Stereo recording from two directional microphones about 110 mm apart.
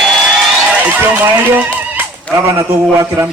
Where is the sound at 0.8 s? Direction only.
15° right (ahead or behind).